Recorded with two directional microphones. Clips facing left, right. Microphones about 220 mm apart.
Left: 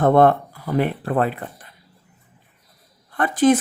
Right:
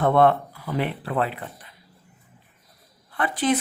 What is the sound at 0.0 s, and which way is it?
Speech, 45° left (ahead or behind).